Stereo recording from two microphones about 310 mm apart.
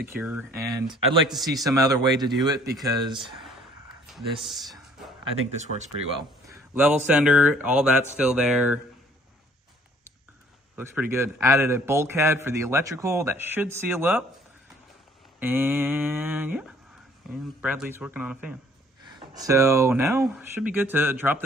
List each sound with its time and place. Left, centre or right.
0.2 s a man's voice: centre
1.3 s a sound: centre
1.6 s a man's voice: centre
4.0 s speech: centre
4.7 s music: centre
5.5 s speech: right
6.0 s speech: centre
7.1 s a sound: centre
10.8 s a man's voice: centre
15.4 s a sound: centre
19.3 s a man's voice: centre